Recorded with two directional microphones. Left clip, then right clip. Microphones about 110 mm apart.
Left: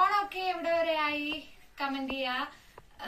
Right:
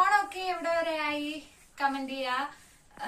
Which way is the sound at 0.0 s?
35° right (ahead or behind).